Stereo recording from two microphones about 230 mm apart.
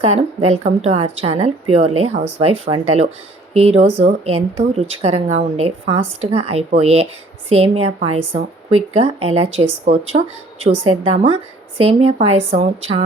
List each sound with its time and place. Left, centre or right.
0.0 s speech: right